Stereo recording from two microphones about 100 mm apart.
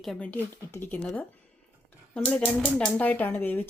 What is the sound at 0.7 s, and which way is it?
Speech, 20° left (ahead or behind).